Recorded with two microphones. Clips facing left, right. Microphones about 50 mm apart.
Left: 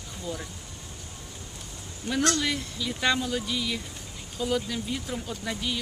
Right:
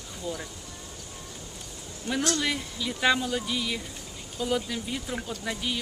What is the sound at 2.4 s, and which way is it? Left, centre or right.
Speech, centre.